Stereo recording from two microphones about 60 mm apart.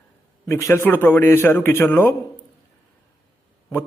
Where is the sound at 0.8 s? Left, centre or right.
Left.